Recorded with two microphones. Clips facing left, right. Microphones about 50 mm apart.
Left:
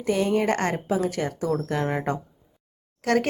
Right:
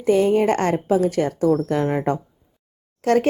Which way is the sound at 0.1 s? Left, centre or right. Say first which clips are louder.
Right 6 dB; right.